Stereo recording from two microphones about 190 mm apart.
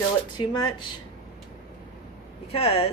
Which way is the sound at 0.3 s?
25° left (ahead or behind).